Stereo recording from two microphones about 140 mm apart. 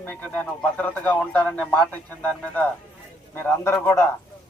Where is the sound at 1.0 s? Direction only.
10° left (ahead or behind).